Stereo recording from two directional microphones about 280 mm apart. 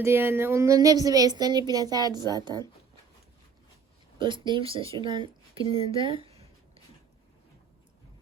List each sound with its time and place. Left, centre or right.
0.0 s a woman's voice: centre
4.2 s speech: centre